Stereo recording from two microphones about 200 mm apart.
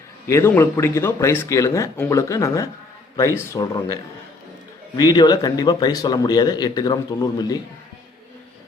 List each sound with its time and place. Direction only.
0.3 s speech: 15° left (ahead or behind)
4.9 s speech: 20° left (ahead or behind)